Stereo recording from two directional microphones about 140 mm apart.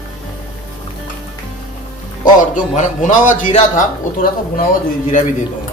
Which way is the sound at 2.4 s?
65° left (ahead or behind).